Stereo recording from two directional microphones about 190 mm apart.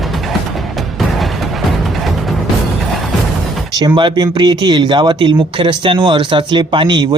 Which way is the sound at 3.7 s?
25° right (ahead or behind).